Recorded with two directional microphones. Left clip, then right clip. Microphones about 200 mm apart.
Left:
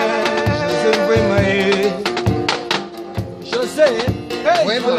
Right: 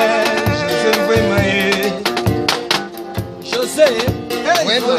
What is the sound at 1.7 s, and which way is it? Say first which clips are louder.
Music: even; 40° right (ahead or behind).